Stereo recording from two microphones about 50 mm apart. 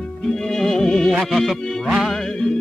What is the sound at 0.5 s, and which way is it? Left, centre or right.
Music, centre.